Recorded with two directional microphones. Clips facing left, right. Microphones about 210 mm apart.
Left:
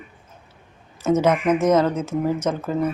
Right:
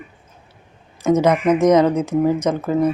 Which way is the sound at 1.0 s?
10° right (ahead or behind).